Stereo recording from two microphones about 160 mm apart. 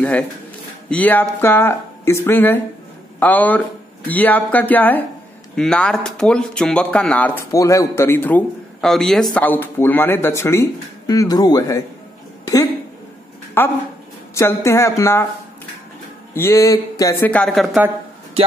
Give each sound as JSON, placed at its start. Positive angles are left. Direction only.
{"t": 0.8, "sound": "a man's voice", "side_deg": 10}
{"t": 7.5, "sound": "a man's voice", "side_deg": 20}
{"t": 13.6, "sound": "a man's voice", "side_deg": 15}
{"t": 16.3, "sound": "a man's voice", "side_deg": 15}
{"t": 17.3, "sound": "speech", "side_deg": 5}